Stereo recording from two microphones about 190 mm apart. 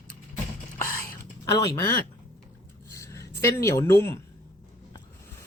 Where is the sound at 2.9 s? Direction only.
15° left (ahead or behind).